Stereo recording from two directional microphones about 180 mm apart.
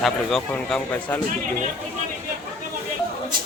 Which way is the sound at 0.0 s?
Centre (ahead or behind).